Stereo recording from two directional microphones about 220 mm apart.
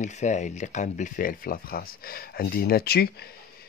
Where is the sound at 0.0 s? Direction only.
35° left (ahead or behind).